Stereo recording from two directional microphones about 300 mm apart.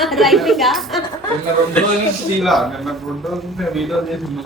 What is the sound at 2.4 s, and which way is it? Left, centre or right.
A man's voice, centre.